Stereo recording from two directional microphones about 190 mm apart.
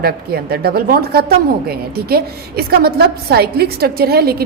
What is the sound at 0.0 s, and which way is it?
A woman's voice, 55° right (ahead or behind).